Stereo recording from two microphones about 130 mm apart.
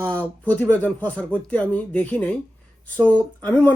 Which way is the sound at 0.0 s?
10° left (ahead or behind).